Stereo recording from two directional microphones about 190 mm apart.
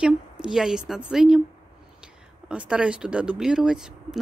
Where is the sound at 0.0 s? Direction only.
5° right (ahead or behind).